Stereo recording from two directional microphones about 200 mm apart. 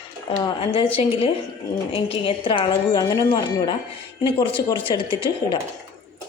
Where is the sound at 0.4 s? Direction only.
25° left (ahead or behind).